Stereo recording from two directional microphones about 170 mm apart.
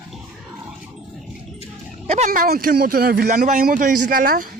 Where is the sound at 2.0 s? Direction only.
45° right (ahead or behind).